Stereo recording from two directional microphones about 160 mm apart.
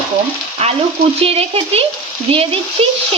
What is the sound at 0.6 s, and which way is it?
Speech, 40° right (ahead or behind).